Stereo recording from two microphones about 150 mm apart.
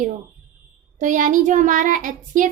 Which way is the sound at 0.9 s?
60° right (ahead or behind).